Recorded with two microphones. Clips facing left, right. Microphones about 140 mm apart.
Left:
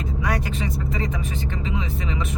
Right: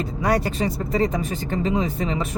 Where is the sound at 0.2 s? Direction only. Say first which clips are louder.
Right 6 dB; 35° right (ahead or behind).